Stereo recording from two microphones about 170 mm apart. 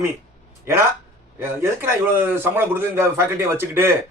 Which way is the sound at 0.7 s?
15° right (ahead or behind).